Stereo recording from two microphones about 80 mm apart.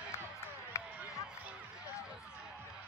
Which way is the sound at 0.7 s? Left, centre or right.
Left.